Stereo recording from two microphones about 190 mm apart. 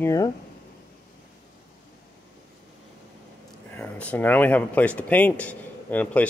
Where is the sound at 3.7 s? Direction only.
5° left (ahead or behind).